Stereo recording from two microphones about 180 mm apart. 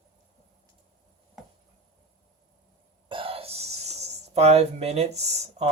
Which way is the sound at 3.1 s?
30° right (ahead or behind).